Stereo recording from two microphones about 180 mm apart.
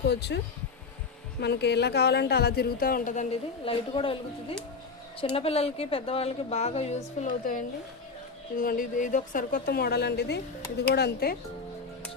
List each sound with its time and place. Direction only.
0.1 s speech: 70° left (ahead or behind)
1.4 s a woman's voice: 70° left (ahead or behind); by 3.2 s 45° left (ahead or behind)
3.7 s a woman's voice: 30° left (ahead or behind); by 11.3 s 60° left (ahead or behind)